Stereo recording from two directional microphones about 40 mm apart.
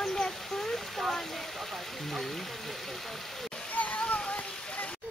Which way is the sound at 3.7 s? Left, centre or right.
Left.